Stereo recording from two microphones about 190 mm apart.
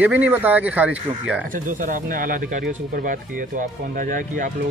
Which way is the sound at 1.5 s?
45° right (ahead or behind).